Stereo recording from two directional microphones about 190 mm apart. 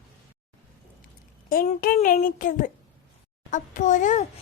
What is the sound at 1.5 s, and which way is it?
A child's voice, 50° left (ahead or behind).